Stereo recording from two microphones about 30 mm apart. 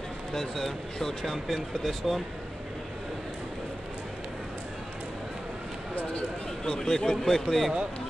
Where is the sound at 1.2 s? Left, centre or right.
Centre.